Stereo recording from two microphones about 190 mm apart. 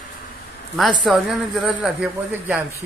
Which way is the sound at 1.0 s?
Centre (ahead or behind).